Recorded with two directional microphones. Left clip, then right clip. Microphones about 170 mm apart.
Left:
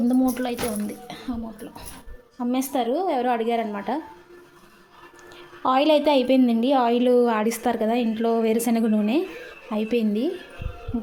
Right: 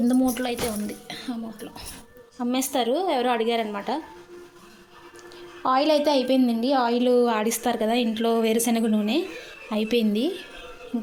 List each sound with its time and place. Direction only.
0.0 s a woman's voice: 10° left (ahead or behind)
5.6 s a woman's voice: 25° left (ahead or behind)
9.6 s a woman's voice: 5° left (ahead or behind)